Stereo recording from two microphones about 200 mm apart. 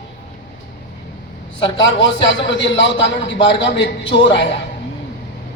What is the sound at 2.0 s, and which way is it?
A man's voice, 65° left (ahead or behind).